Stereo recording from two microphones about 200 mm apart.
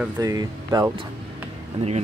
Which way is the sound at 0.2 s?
15° right (ahead or behind).